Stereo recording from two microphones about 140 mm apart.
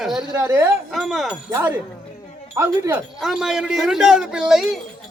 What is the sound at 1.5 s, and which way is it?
Speech, 15° right (ahead or behind).